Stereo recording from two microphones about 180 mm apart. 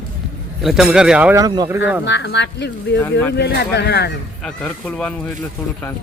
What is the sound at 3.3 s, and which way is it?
Speech, 70° left (ahead or behind).